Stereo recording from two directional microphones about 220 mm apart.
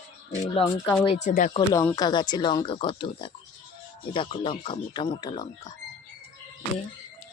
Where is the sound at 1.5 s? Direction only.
15° left (ahead or behind).